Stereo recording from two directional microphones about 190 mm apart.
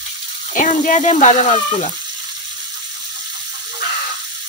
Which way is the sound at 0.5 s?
40° left (ahead or behind).